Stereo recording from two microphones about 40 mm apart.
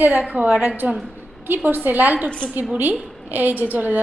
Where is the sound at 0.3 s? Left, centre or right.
Right.